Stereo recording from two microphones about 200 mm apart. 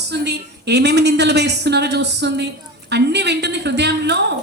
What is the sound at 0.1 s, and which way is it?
Speech, 60° right (ahead or behind).